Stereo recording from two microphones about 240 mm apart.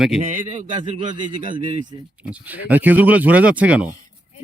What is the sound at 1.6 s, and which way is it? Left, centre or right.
Speech, centre.